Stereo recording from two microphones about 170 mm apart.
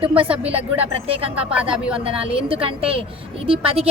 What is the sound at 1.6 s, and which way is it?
Speech, 5° right (ahead or behind).